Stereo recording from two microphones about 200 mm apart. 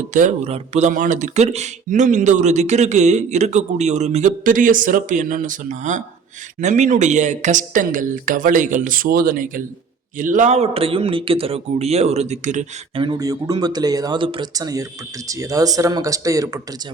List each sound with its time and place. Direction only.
0.1 s speech: 40° right (ahead or behind)
13.0 s speech: 20° right (ahead or behind)